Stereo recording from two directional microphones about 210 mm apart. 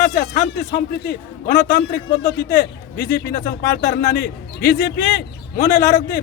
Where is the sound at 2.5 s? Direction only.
50° left (ahead or behind).